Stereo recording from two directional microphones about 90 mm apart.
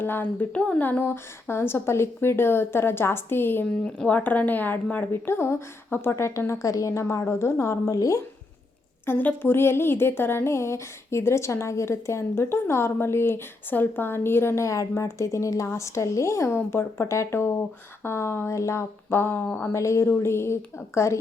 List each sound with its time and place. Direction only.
0.0 s a woman's voice: 20° left (ahead or behind)
3.8 s a woman's voice: 10° left (ahead or behind); by 8.2 s 40° left (ahead or behind)
9.0 s a woman's voice: 20° left (ahead or behind)
19.5 s speech: 15° left (ahead or behind)
19.7 s a woman's voice: 35° left (ahead or behind)